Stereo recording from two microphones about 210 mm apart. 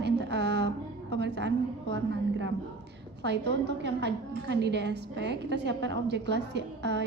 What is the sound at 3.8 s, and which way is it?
A woman's voice, 55° right (ahead or behind).